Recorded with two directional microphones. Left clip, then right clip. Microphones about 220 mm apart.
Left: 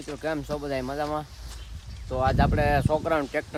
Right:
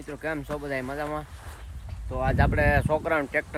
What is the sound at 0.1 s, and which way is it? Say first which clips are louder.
Speech: left 1 dB; 10° left (ahead or behind).